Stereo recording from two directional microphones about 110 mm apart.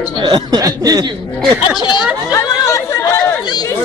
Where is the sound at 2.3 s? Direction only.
30° left (ahead or behind).